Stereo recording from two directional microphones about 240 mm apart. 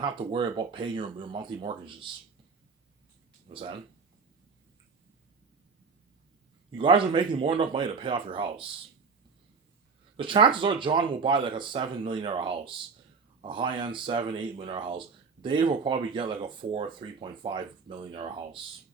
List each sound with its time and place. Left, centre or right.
0.0 s speech: centre
3.5 s speech: right
6.7 s speech: right
10.2 s speech: right